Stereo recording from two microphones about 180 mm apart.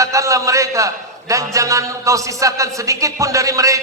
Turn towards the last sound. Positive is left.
turn(degrees=-20)  # may be behind; listen again after turning